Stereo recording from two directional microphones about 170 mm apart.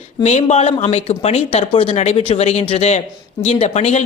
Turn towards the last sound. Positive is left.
turn(degrees=40)  # may be behind; listen again after turning